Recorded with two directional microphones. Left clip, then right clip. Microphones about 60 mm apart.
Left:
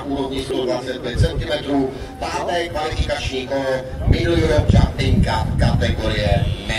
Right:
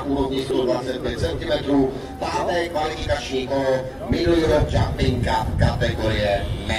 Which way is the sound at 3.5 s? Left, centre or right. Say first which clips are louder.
Even; left.